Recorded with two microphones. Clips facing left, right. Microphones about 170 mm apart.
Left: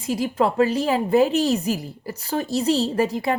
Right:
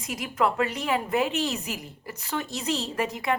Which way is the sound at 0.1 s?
30° left (ahead or behind).